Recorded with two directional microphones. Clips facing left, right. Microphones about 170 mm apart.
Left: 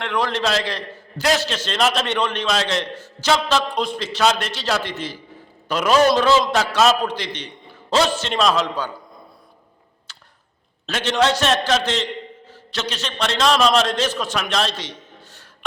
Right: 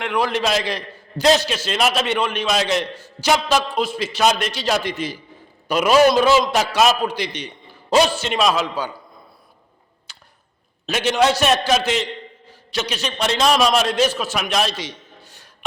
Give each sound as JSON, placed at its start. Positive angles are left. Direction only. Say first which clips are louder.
{"t": 0.0, "sound": "a man's voice", "louder": "right 1 dB", "side_deg": -10}
{"t": 1.2, "sound": "a man's voice", "louder": "right 4 dB", "side_deg": -25}
{"t": 1.5, "sound": "a man's voice", "louder": "even", "side_deg": -10}
{"t": 10.1, "sound": "arrow", "louder": "even", "side_deg": -10}
{"t": 10.8, "sound": "a man's voice", "louder": "right 2 dB", "side_deg": -10}